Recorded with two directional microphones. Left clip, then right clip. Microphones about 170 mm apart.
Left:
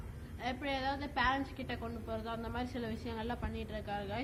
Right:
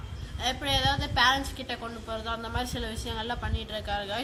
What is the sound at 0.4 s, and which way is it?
A woman's voice, 30° right (ahead or behind).